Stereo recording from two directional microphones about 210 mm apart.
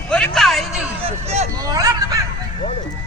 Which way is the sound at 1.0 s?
30° right (ahead or behind).